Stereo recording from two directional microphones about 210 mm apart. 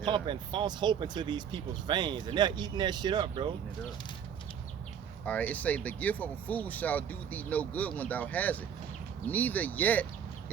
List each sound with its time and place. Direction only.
0.0 s speech: 20° right (ahead or behind)
5.2 s speech: 5° left (ahead or behind)